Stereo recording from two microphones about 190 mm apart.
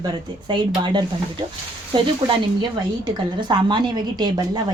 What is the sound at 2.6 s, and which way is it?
Speech, 25° right (ahead or behind).